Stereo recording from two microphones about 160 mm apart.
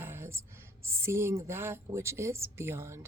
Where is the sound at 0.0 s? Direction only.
15° right (ahead or behind).